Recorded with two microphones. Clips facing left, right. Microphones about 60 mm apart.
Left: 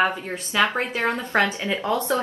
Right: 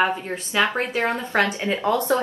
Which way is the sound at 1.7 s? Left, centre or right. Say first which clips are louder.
Right 2 dB; right.